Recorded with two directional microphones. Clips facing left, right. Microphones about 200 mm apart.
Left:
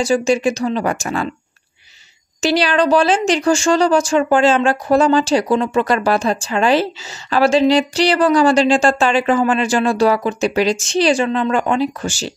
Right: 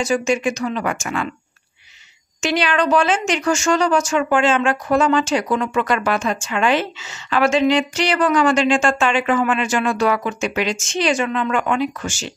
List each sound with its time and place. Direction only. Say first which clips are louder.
0.0 s speech: left 3 dB; 35° left (ahead or behind)
2.4 s speech: left 4 dB; 35° left (ahead or behind)